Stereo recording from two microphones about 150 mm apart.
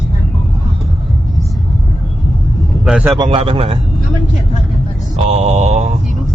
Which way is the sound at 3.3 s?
40° right (ahead or behind).